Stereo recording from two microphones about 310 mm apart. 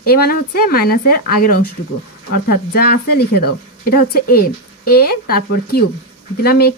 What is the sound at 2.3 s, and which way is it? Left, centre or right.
Speech, left.